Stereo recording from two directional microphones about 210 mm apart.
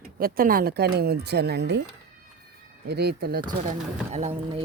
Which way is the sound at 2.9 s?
50° right (ahead or behind).